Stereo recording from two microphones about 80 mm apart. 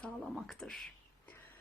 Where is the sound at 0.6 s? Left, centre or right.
Centre.